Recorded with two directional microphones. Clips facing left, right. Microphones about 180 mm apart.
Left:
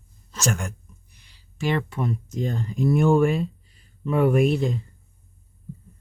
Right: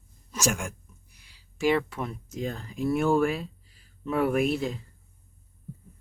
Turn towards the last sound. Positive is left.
turn(degrees=-5)  # may be behind; listen again after turning